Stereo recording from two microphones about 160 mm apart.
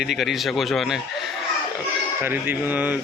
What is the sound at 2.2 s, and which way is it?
Speech, 15° right (ahead or behind).